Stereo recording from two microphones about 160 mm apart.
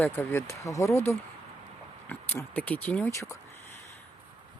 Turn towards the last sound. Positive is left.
turn(degrees=15)  # may be behind; listen again after turning